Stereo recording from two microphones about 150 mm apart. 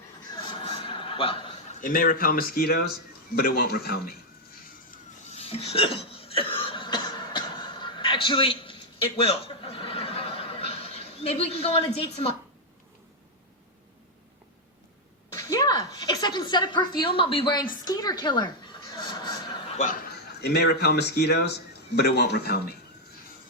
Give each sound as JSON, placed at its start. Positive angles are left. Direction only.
{"t": 0.6, "sound": "a sound", "side_deg": 35}
{"t": 1.8, "sound": "a man's voice", "side_deg": 65}
{"t": 5.2, "sound": "hiccup", "side_deg": 45}
{"t": 9.1, "sound": "chuckle", "side_deg": 40}
{"t": 15.4, "sound": "a sound", "side_deg": 20}
{"t": 19.7, "sound": "speech", "side_deg": 55}
{"t": 20.1, "sound": "a man's voice", "side_deg": 90}